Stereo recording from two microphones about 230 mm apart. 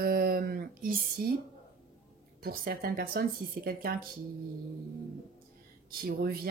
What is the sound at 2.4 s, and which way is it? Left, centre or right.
Speech, right.